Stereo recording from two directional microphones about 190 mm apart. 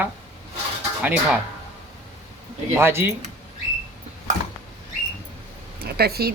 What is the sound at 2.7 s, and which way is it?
Speech, 15° right (ahead or behind).